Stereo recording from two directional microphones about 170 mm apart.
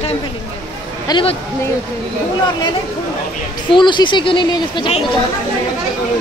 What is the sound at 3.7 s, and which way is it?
A woman's voice, 25° left (ahead or behind).